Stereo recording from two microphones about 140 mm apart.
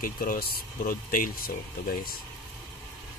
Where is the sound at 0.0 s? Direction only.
90° left.